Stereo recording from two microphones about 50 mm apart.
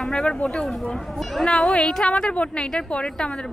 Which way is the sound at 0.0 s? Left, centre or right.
Centre.